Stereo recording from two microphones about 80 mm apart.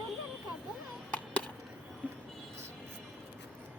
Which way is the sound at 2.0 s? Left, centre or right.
Centre.